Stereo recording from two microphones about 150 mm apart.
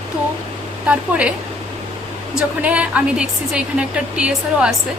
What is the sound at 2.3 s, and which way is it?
A woman's voice, 10° right (ahead or behind).